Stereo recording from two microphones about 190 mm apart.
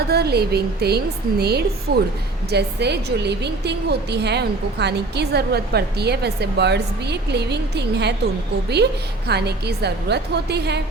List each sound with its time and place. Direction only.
0.1 s a woman's voice: 60° right (ahead or behind)